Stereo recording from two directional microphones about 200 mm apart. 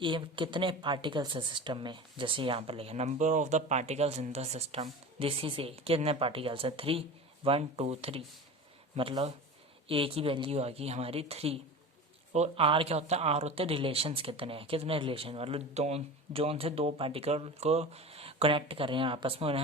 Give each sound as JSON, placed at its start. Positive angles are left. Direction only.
{"t": 0.0, "sound": "speech", "side_deg": -25}